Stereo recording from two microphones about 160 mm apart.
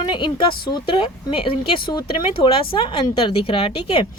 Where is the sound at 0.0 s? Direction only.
30° left (ahead or behind).